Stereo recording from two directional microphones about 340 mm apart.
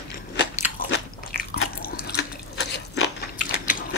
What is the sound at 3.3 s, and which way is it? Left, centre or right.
Mechanisms, left.